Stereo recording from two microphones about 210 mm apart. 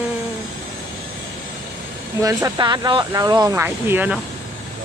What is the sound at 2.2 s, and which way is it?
Speech, 20° right (ahead or behind).